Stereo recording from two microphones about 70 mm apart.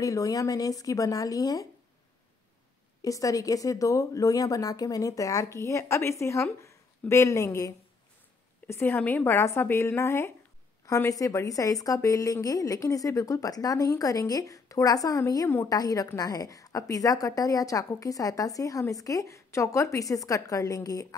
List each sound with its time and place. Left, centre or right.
0.0 s a woman's voice: left
3.0 s a woman's voice: left
8.6 s a woman's voice: left
15.7 s a woman's voice: left